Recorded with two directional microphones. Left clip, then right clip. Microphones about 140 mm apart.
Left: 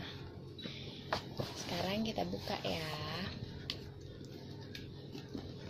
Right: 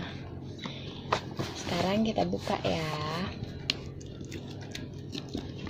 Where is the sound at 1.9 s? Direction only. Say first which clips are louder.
Right 9 dB; 45° right (ahead or behind).